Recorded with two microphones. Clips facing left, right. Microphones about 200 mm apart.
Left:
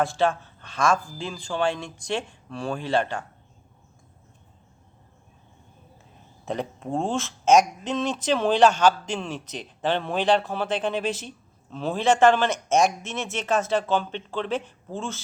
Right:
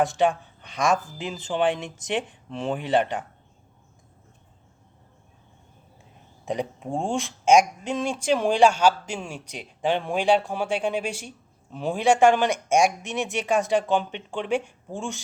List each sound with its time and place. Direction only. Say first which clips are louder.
0.0 s speech: right 1 dB; 15° right (ahead or behind)
6.4 s a sound: right 1 dB; 15° right (ahead or behind)
6.9 s speech: left 1 dB; 15° right (ahead or behind)